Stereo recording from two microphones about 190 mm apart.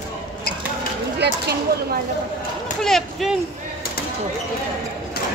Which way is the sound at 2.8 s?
Centre (ahead or behind).